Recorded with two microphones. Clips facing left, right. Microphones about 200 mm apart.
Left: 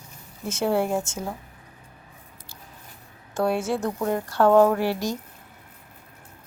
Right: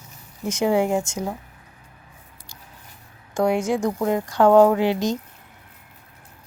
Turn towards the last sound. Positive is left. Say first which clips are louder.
# right 4 dB
turn(degrees=-20)  # may be behind; listen again after turning